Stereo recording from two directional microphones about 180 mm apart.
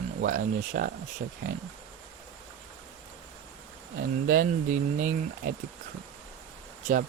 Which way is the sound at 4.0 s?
50° right (ahead or behind).